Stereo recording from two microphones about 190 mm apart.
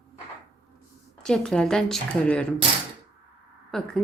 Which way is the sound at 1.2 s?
5° left (ahead or behind).